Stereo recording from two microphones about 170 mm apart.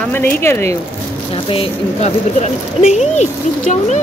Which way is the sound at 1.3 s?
35° left (ahead or behind).